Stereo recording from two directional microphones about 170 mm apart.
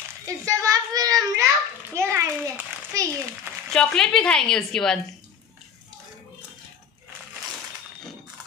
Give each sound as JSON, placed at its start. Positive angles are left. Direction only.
{"t": 0.2, "sound": "a child's voice", "side_deg": -20}
{"t": 3.7, "sound": "a woman's voice", "side_deg": 5}